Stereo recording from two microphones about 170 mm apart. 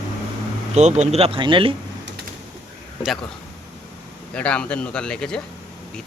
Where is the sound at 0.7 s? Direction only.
40° right (ahead or behind).